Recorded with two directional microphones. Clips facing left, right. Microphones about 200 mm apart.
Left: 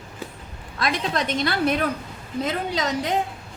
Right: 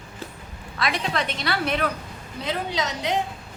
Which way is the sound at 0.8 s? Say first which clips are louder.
Left 2 dB; 45° left (ahead or behind).